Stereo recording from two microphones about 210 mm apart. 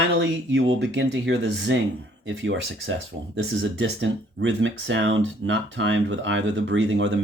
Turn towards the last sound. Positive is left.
turn(degrees=-65)  # may be behind; listen again after turning